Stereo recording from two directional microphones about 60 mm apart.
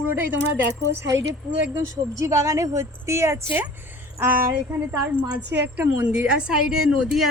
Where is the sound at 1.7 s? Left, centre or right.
Right.